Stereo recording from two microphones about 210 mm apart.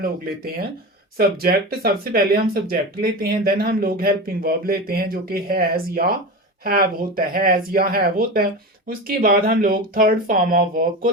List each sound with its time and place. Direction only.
1.1 s speech: 45° right (ahead or behind)